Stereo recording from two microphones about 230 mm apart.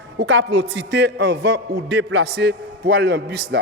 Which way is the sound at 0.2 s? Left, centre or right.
Right.